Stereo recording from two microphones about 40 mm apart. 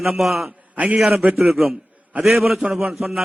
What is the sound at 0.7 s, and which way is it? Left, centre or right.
Speech, right.